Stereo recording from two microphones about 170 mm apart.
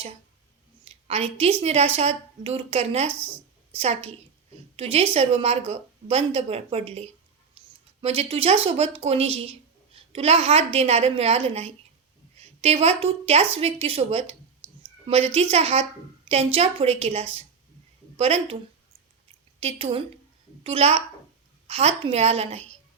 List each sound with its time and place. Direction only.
0.9 s a woman's voice: 35° right (ahead or behind)
19.5 s a woman's voice: 35° right (ahead or behind)